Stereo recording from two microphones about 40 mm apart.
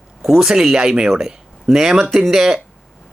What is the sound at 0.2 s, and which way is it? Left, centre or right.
A man's voice, centre.